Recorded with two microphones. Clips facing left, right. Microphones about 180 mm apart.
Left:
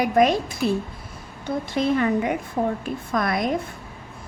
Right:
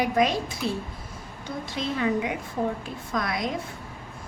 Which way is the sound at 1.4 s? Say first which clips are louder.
Left 8 dB; 55° left (ahead or behind).